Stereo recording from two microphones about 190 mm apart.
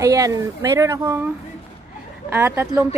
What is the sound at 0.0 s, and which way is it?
Speech, 15° right (ahead or behind).